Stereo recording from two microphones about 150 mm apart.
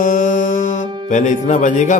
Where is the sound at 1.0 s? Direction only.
55° left (ahead or behind).